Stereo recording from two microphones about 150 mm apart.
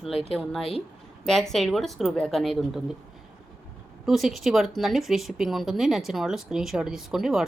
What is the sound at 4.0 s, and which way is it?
Speech, centre (ahead or behind).